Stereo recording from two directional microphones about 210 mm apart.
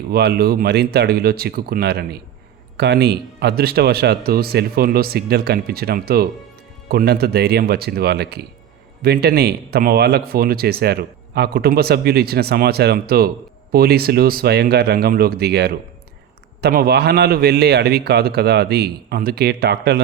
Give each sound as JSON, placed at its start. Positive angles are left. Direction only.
{"t": 0.1, "sound": "speech", "side_deg": -50}